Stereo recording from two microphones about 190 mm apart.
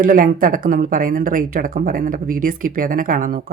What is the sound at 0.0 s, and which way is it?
Speech, 45° right (ahead or behind).